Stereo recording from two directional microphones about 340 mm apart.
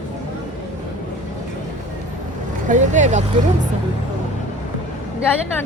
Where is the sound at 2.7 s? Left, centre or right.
Right.